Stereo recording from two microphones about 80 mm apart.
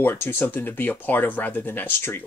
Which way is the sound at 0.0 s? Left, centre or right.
Left.